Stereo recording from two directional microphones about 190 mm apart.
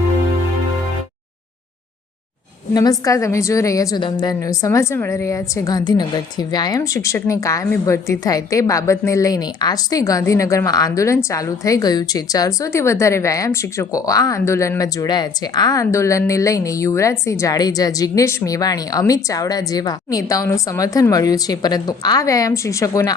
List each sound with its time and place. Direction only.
2.7 s a woman's voice: 20° left (ahead or behind)